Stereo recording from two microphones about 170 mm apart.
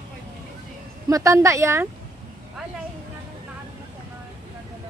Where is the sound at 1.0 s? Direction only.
20° right (ahead or behind).